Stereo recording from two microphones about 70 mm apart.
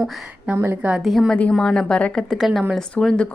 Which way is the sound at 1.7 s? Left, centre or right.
Centre.